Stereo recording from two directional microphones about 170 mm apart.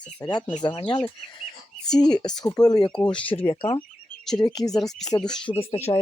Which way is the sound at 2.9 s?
5° left (ahead or behind).